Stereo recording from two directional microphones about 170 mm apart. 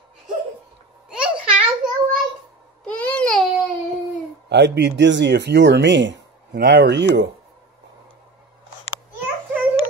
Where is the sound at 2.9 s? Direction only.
10° left (ahead or behind).